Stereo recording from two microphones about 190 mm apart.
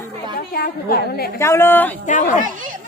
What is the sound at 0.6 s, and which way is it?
Speech, 55° left (ahead or behind).